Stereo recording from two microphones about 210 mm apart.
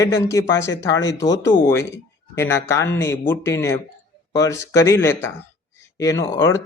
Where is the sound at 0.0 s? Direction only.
15° left (ahead or behind).